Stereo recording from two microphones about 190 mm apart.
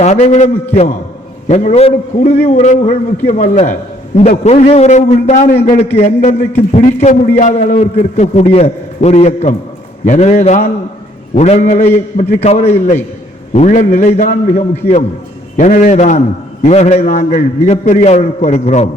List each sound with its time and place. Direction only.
0.0 s a man's voice: 40° left (ahead or behind)